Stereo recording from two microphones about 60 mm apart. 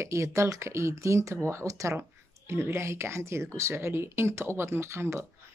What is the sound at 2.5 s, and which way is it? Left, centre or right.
Speech, right.